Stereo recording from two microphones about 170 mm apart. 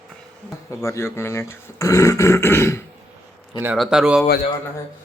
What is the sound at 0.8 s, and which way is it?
Speech, 15° left (ahead or behind).